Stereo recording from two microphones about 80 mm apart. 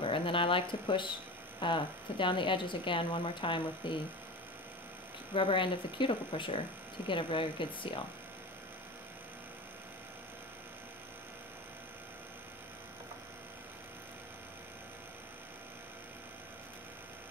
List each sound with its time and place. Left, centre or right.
0.0 s speech: left
5.3 s speech: left